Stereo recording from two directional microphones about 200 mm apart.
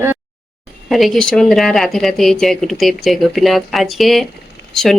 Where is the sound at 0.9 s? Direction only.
Centre (ahead or behind).